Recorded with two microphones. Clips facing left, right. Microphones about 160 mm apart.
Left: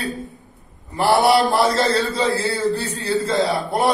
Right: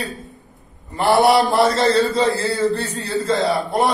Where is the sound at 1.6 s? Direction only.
55° right (ahead or behind).